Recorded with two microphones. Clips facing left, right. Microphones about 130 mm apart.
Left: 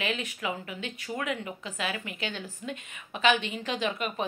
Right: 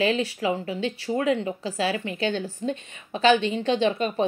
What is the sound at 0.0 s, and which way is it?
A woman's voice, 30° right (ahead or behind).